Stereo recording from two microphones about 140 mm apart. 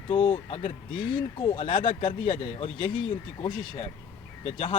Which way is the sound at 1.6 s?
35° left (ahead or behind).